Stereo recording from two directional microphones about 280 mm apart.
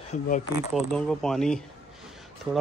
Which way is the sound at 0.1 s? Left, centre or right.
Left.